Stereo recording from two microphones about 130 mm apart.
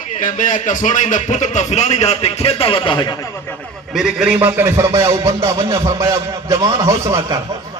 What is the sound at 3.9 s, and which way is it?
A man's voice, 5° right (ahead or behind).